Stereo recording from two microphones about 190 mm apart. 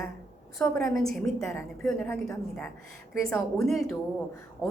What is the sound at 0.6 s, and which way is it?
A woman's voice, 5° left (ahead or behind).